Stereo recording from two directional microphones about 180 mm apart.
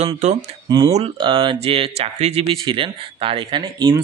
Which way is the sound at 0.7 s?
25° right (ahead or behind).